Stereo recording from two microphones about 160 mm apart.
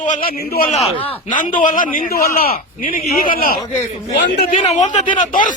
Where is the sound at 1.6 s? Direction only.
55° left (ahead or behind).